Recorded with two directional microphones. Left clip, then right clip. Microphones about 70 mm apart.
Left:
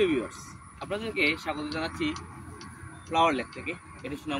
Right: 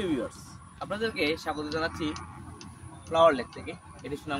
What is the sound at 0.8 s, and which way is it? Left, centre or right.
Speech, right.